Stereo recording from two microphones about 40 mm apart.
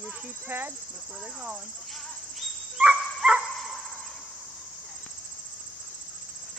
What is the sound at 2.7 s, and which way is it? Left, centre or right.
Dog, centre.